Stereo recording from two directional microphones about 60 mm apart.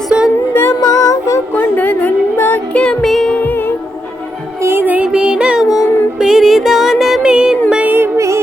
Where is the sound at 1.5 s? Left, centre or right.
Left.